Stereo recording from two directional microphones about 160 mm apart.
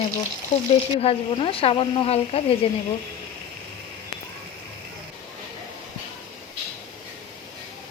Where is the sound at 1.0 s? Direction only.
35° left (ahead or behind).